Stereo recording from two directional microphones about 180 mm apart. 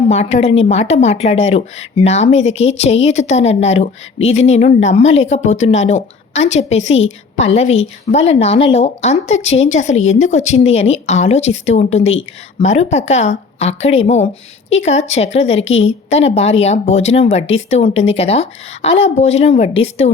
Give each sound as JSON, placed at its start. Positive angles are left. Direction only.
{"t": 0.1, "sound": "a woman's voice", "side_deg": 35}